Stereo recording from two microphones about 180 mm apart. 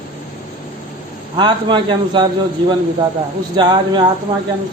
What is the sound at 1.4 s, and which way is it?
Speech, 25° right (ahead or behind).